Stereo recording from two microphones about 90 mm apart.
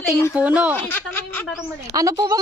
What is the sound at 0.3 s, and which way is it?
Speech, 15° right (ahead or behind).